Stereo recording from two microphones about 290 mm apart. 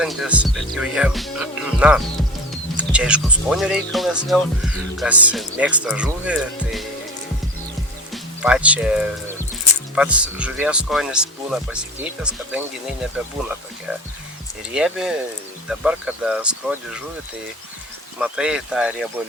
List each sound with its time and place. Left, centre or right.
0.0 s speech: centre
8.1 s music: centre
9.9 s speech: centre
14.7 s speech: centre
18.2 s speech: centre